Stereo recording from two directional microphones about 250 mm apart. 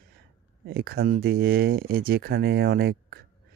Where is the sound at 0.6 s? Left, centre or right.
Right.